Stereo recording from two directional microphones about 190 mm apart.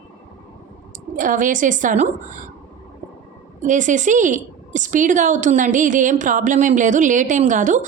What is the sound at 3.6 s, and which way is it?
A woman's voice, 40° right (ahead or behind).